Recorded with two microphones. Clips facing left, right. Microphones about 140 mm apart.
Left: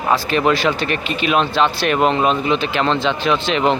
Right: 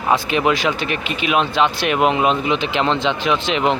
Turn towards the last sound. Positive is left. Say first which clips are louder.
# left 1 dB
turn(degrees=-10)  # may be behind; listen again after turning